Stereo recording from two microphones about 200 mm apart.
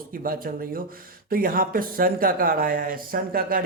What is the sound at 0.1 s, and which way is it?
Speech, 45° right (ahead or behind).